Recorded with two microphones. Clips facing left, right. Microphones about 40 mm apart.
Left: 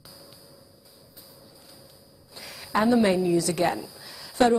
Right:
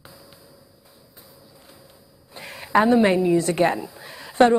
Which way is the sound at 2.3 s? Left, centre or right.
Right.